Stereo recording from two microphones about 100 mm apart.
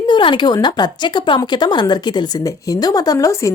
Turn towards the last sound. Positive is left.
turn(degrees=30)  # may be behind; listen again after turning